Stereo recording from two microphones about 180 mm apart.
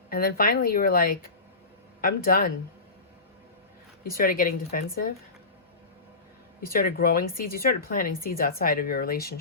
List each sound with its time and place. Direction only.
0.1 s speech: 55° left (ahead or behind)
4.2 s speech: 50° left (ahead or behind)
6.6 s speech: 55° left (ahead or behind)